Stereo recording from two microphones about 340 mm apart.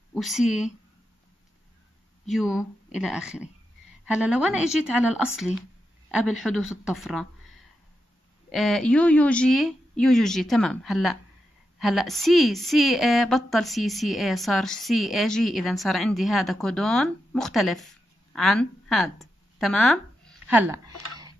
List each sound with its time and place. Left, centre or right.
0.1 s speech: centre
2.3 s a woman's voice: centre
8.5 s a woman's voice: centre
21.1 s a sound: centre